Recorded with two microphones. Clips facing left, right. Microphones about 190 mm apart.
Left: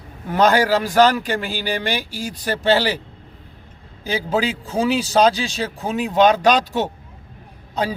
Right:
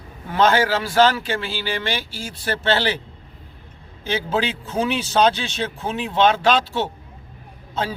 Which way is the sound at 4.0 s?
35° left (ahead or behind).